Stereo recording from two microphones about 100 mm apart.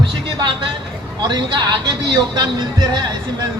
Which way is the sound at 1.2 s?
50° right (ahead or behind).